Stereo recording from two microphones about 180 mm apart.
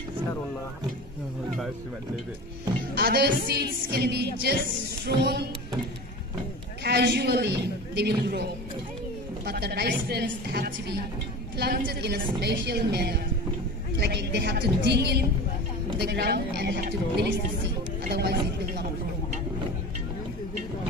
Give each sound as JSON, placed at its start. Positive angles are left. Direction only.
{"t": 2.9, "sound": "a woman's voice", "side_deg": -60}
{"t": 6.8, "sound": "a man's voice", "side_deg": -70}
{"t": 9.5, "sound": "a woman's voice", "side_deg": -60}
{"t": 18.1, "sound": "a woman's voice", "side_deg": -70}